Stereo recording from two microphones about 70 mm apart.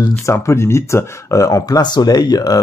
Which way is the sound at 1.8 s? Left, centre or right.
Left.